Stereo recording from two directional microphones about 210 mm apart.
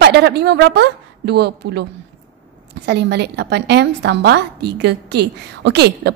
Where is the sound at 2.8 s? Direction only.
55° right (ahead or behind).